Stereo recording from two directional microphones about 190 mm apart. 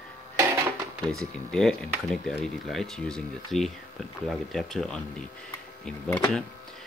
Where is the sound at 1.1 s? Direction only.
5° left (ahead or behind).